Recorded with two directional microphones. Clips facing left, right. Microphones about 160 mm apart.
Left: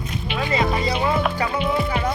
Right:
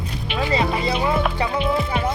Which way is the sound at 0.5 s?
20° right (ahead or behind).